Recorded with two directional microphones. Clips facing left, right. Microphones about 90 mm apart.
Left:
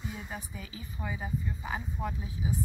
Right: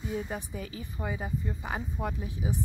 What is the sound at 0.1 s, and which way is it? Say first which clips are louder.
A woman's voice: right 7 dB; 45° right (ahead or behind).